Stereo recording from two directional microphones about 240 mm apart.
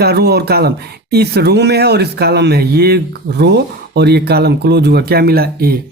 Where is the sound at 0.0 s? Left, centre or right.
Right.